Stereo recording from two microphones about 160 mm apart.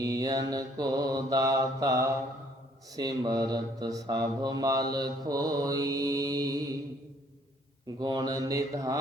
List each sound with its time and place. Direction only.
0.0 s mantra: 20° right (ahead or behind)
7.9 s mantra: 25° right (ahead or behind)